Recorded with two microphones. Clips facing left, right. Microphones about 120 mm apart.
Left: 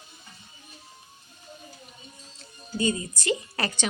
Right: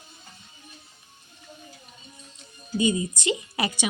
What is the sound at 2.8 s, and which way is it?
A woman's voice, 15° right (ahead or behind).